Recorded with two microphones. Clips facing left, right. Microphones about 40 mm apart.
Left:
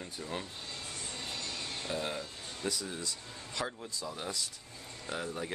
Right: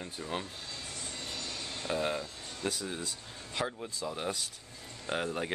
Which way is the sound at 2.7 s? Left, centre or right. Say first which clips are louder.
Right 1 dB; right.